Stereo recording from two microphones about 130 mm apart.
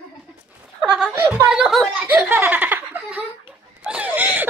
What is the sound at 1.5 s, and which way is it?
Giggle, 5° right (ahead or behind).